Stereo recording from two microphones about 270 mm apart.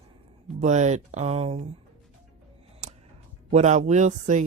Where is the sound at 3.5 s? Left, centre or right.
Right.